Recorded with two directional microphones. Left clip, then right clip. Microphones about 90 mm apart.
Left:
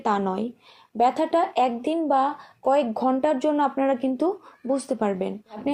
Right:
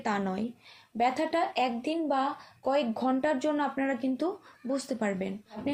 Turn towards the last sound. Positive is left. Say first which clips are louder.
# left 6 dB
turn(degrees=35)  # may be behind; listen again after turning